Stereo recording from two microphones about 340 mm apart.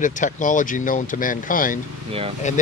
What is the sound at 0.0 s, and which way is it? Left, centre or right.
Speech, left.